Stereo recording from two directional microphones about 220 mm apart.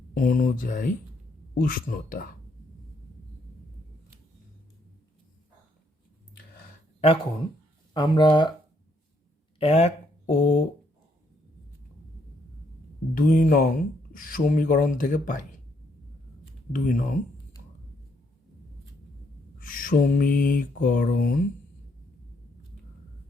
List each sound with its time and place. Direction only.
0.1 s speech: 40° left (ahead or behind)
7.9 s speech: 20° left (ahead or behind)
9.6 s speech: 30° left (ahead or behind)
13.1 s speech: 40° left (ahead or behind)
16.7 s speech: 35° left (ahead or behind)
19.6 s speech: 40° left (ahead or behind)